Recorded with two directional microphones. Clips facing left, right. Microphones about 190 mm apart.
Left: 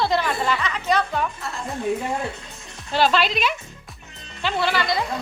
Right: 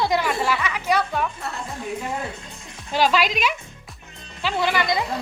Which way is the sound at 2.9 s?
10° right (ahead or behind).